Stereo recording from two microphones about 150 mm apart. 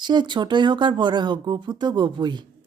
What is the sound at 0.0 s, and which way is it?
Speech, 30° right (ahead or behind).